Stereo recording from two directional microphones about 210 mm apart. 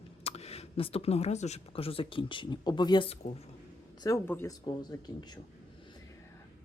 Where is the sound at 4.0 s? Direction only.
15° left (ahead or behind).